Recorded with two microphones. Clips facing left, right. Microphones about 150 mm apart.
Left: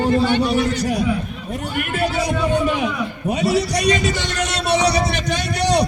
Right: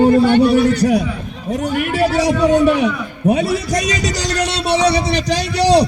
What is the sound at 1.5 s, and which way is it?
Speech, 90° right.